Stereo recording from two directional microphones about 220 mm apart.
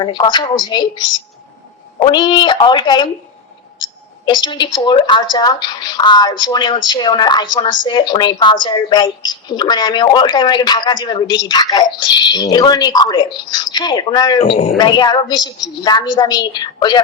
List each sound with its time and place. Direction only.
0.0 s speech: 20° left (ahead or behind)
4.3 s speech: 20° left (ahead or behind)